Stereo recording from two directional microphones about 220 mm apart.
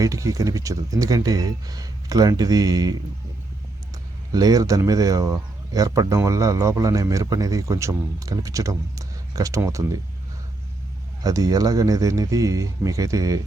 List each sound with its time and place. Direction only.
0.0 s speech: 15° right (ahead or behind)
4.3 s speech: 15° right (ahead or behind)
11.2 s speech: 15° right (ahead or behind)